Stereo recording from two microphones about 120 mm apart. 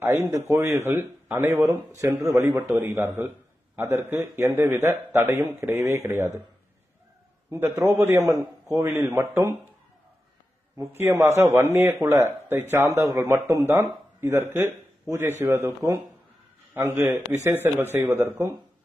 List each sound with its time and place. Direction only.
0.0 s a man's voice: 25° right (ahead or behind)
7.5 s a man's voice: 20° right (ahead or behind)
10.8 s a man's voice: 20° right (ahead or behind)